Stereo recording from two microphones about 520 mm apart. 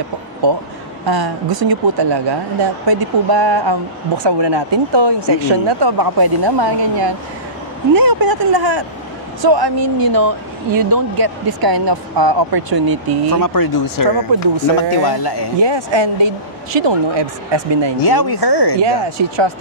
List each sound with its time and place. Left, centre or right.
1.0 s speech: right
13.3 s speech: left
15.6 s speech: right
18.0 s speech: left
18.8 s speech: right